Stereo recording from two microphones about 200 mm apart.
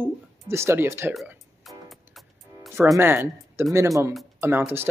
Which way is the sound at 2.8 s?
10° right (ahead or behind).